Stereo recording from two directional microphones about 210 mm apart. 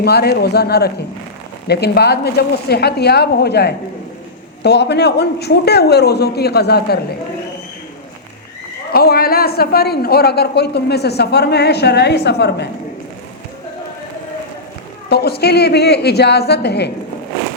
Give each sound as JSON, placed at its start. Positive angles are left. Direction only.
{"t": 0.0, "sound": "a woman's voice", "side_deg": 50}
{"t": 8.9, "sound": "a woman's voice", "side_deg": 45}
{"t": 15.1, "sound": "a woman's voice", "side_deg": 50}